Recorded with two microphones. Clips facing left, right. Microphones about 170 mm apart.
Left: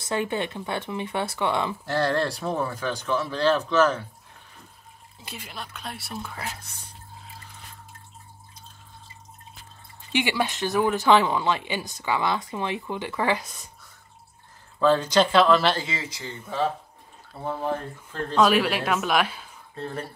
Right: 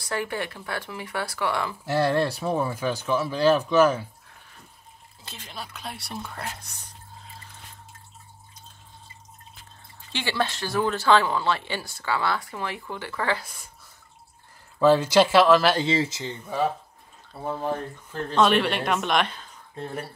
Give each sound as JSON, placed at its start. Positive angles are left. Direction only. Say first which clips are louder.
{"t": 0.0, "sound": "speech", "louder": "left 3 dB", "side_deg": 20}
{"t": 1.9, "sound": "speech", "louder": "right 3 dB", "side_deg": -10}
{"t": 5.2, "sound": "speech", "louder": "left 3 dB", "side_deg": 10}
{"t": 5.6, "sound": "speech", "louder": "right 2 dB", "side_deg": 0}
{"t": 10.1, "sound": "speech", "louder": "left 2 dB", "side_deg": 15}
{"t": 14.8, "sound": "speech", "louder": "right 2 dB", "side_deg": -10}
{"t": 15.8, "sound": "speech", "louder": "right 9 dB", "side_deg": -30}
{"t": 18.3, "sound": "speech", "louder": "even", "side_deg": 5}
{"t": 19.8, "sound": "speech", "louder": "left 1 dB", "side_deg": -10}